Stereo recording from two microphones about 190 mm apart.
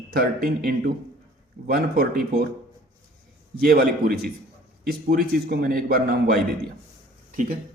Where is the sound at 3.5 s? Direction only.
55° right (ahead or behind).